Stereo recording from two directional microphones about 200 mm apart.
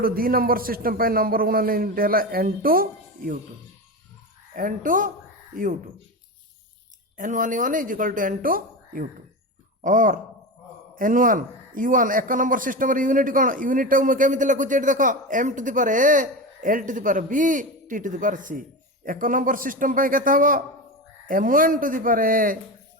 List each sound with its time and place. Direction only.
0.0 s a man's voice: 45° right (ahead or behind)
4.5 s a man's voice: 40° right (ahead or behind)
7.2 s a man's voice: 40° right (ahead or behind)